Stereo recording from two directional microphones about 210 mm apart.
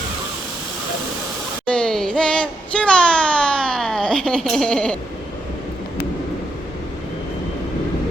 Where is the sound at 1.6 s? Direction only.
5° left (ahead or behind).